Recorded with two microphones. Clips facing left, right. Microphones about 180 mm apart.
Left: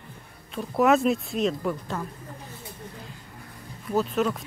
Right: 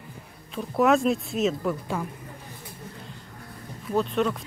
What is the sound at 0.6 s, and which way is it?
A woman's voice, centre (ahead or behind).